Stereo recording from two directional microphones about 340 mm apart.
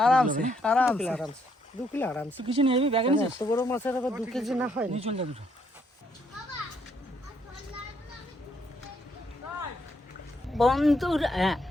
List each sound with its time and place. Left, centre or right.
0.0 s speech: centre
2.5 s speech: centre
3.4 s speech: centre
4.9 s speech: centre
10.6 s speech: centre